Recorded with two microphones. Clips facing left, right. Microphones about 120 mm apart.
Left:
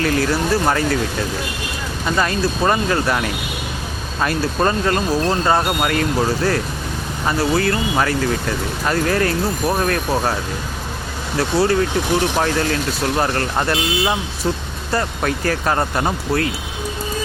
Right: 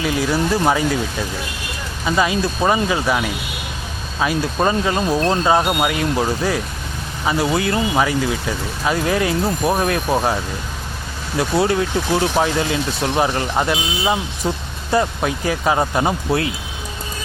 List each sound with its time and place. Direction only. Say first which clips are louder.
0.0 s speech: left 1 dB; 10° right (ahead or behind)
2.0 s speech: right 1 dB; 5° right (ahead or behind)
7.9 s speech: even; 10° right (ahead or behind)
11.3 s speech: left 1 dB; 20° right (ahead or behind)